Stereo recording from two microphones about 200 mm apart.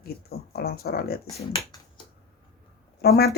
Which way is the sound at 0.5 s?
50° left (ahead or behind).